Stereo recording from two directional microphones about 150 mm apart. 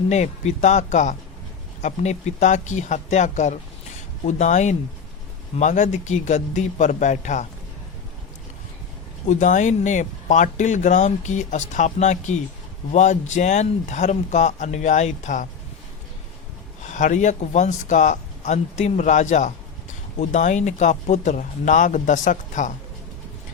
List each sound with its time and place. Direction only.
0.1 s speech: 50° left (ahead or behind)
9.2 s speech: 55° left (ahead or behind)
16.8 s speech: 55° left (ahead or behind)